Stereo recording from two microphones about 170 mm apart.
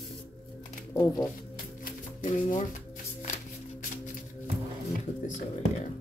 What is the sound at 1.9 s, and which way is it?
Music, 50° left (ahead or behind).